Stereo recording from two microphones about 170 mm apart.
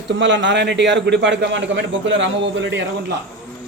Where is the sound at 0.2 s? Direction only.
90° right.